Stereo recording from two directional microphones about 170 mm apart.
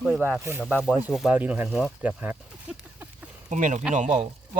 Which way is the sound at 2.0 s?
10° right (ahead or behind).